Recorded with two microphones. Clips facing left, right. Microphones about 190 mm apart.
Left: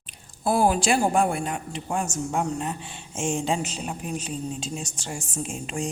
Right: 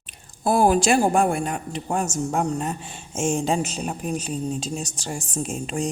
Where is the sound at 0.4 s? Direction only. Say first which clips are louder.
Right 3 dB; 45° right (ahead or behind).